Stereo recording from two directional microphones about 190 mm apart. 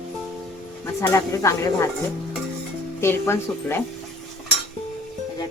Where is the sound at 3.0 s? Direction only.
15° left (ahead or behind).